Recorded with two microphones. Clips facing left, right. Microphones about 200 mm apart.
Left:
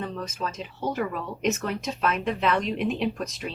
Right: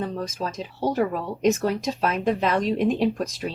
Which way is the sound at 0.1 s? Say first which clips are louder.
Right 3 dB; 40° right (ahead or behind).